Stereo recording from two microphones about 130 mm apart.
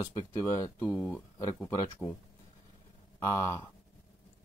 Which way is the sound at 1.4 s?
25° left (ahead or behind).